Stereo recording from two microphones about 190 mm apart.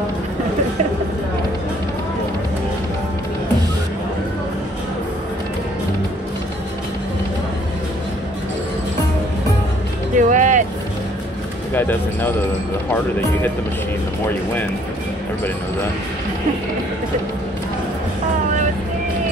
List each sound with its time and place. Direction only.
10.1 s music: 40° right (ahead or behind)
11.7 s speech: 10° left (ahead or behind)